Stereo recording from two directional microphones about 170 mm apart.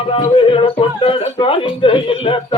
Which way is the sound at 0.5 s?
35° left (ahead or behind).